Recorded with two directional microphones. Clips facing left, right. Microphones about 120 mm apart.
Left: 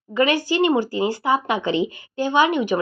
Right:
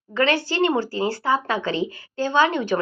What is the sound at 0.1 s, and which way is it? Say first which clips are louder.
A woman's voice: left 2 dB; 15° left (ahead or behind).